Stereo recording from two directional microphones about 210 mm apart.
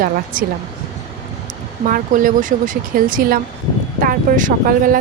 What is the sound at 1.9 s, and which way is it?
Speech, 40° right (ahead or behind).